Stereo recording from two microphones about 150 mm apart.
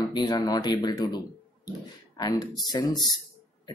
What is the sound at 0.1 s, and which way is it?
Speech, 25° left (ahead or behind).